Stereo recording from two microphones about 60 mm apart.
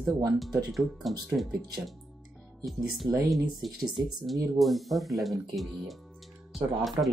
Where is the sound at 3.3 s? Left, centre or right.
Centre.